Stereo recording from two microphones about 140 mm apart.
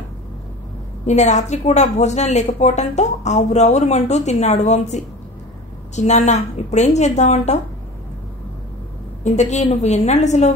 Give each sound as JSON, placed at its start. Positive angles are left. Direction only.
{"t": 1.0, "sound": "a woman's voice", "side_deg": 55}
{"t": 9.2, "sound": "a woman's voice", "side_deg": 55}